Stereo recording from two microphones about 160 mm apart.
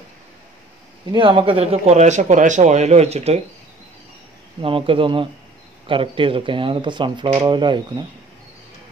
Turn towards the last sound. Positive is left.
turn(degrees=-30)  # may be behind; listen again after turning